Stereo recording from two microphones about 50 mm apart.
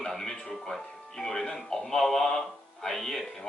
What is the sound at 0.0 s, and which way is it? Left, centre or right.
Speech, centre.